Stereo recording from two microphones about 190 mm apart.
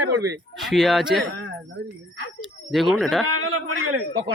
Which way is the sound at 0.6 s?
Centre (ahead or behind).